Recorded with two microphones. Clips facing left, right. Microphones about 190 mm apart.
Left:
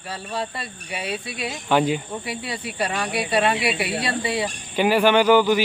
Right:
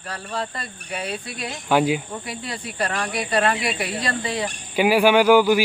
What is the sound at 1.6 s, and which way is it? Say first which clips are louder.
Speech: right 1 dB; 10° right (ahead or behind).